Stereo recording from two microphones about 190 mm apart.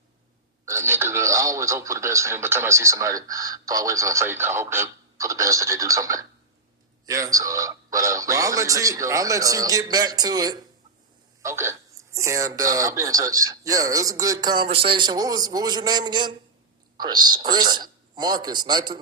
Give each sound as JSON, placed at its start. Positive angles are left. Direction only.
{"t": 0.6, "sound": "a man's voice", "side_deg": -15}